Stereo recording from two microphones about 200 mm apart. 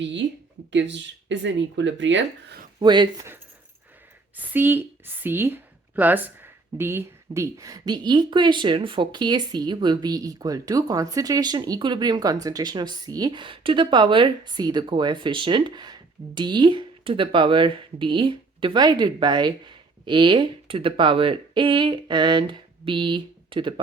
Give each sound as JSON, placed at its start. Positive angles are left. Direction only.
{"t": 0.0, "sound": "speech", "side_deg": -65}
{"t": 2.7, "sound": "speech", "side_deg": -20}
{"t": 4.4, "sound": "a woman's voice", "side_deg": -10}